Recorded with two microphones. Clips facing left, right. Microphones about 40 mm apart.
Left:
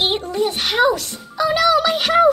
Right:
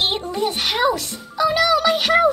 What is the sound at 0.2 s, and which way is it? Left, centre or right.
A child's voice, centre.